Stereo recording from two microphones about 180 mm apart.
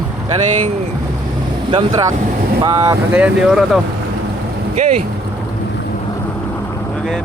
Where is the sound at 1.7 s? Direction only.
20° right (ahead or behind).